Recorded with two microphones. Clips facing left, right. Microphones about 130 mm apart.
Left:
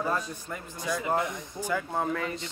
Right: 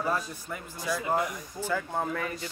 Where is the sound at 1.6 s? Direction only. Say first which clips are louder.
Left 1 dB; 15° left (ahead or behind).